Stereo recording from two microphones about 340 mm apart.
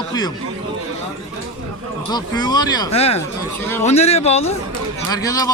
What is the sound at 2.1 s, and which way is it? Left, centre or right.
Speech, centre.